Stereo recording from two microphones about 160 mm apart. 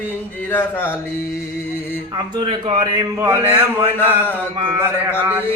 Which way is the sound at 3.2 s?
10° right (ahead or behind).